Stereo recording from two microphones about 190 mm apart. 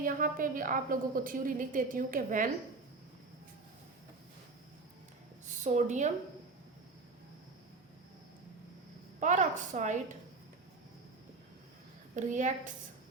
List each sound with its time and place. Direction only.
0.0 s a woman's voice: 45° right (ahead or behind)
5.6 s a woman's voice: 40° right (ahead or behind)
9.2 s a woman's voice: 40° right (ahead or behind)
12.1 s a woman's voice: 40° right (ahead or behind)